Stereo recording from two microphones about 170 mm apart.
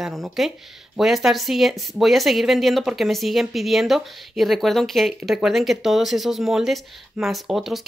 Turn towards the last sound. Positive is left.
turn(degrees=0)  # may be behind; listen again after turning